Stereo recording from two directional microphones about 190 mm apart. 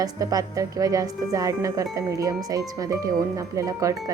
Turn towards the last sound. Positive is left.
turn(degrees=-15)  # may be behind; listen again after turning